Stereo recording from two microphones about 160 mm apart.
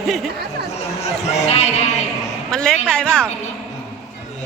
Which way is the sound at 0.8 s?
40° left (ahead or behind).